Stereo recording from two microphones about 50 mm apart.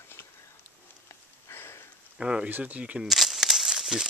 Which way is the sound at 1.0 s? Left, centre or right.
Left.